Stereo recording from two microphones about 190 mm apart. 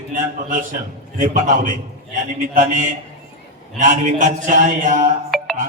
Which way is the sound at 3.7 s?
40° right (ahead or behind).